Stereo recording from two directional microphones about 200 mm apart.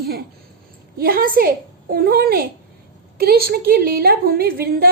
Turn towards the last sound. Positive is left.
turn(degrees=-50)  # may be behind; listen again after turning